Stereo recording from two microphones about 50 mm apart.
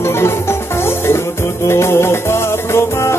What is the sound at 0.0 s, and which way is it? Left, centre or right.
Music, left.